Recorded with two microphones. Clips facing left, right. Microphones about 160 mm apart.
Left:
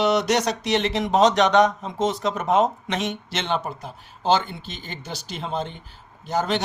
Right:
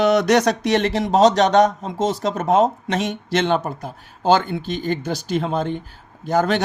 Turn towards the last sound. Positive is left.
turn(degrees=-50)  # may be behind; listen again after turning